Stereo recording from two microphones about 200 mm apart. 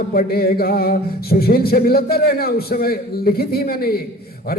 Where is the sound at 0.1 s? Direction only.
50° left (ahead or behind).